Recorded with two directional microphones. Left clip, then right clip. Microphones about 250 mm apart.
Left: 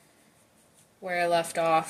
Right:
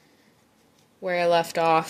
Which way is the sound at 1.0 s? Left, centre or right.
Right.